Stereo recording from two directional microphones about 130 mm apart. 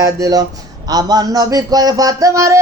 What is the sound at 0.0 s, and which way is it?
A man's voice, 30° right (ahead or behind).